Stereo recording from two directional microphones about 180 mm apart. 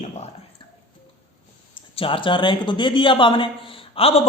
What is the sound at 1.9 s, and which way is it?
A man's voice, 30° left (ahead or behind).